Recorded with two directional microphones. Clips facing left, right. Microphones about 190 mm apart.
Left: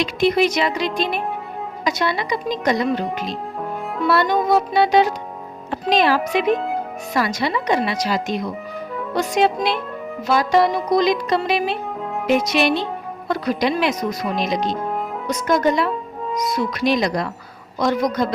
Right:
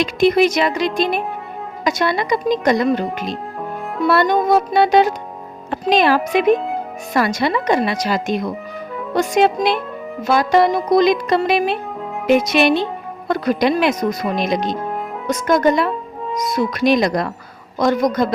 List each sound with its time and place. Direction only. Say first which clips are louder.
0.0 s speech: right 3 dB; 50° right (ahead or behind)
5.9 s music: right 2 dB; 55° right (ahead or behind)
6.4 s speech: right 4 dB; centre (ahead or behind)
7.1 s speech: right 4 dB; 50° right (ahead or behind)
10.2 s music: right 2 dB; 55° right (ahead or behind)
13.2 s speech: right 4 dB; 55° right (ahead or behind)
14.8 s music: even; centre (ahead or behind)
15.3 s speech: right 3 dB; 50° right (ahead or behind)